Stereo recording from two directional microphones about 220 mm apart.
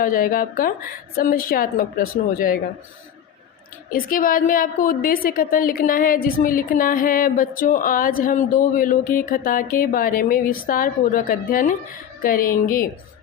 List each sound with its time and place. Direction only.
0.0 s a woman's voice: 40° left (ahead or behind)
3.9 s a woman's voice: 40° left (ahead or behind)